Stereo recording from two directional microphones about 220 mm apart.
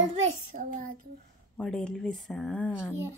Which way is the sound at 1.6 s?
5° left (ahead or behind).